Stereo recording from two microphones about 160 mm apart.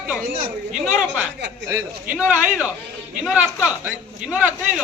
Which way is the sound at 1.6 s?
15° right (ahead or behind).